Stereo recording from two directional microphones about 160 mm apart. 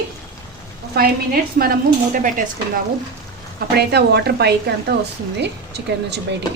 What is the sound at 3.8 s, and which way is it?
A woman's voice, 90° right.